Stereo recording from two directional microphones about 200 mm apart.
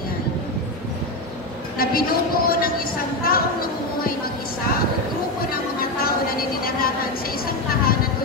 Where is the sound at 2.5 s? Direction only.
50° left (ahead or behind).